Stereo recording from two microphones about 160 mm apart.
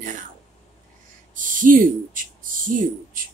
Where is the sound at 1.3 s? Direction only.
55° right (ahead or behind).